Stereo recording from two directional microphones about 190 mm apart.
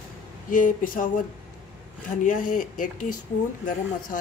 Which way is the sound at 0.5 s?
45° left (ahead or behind).